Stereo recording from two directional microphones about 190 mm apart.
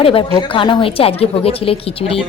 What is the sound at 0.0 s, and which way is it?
A woman's voice, 30° left (ahead or behind).